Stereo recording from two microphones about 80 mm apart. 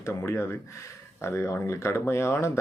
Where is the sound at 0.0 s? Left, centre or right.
Left.